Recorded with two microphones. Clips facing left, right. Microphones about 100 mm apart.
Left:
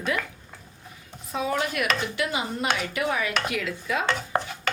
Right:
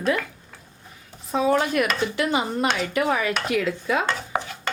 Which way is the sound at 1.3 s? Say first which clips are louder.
Right 6 dB; 35° right (ahead or behind).